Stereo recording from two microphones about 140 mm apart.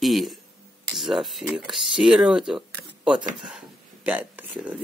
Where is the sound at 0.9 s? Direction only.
Centre (ahead or behind).